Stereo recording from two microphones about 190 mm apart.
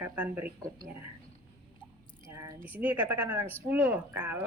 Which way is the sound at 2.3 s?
15° right (ahead or behind).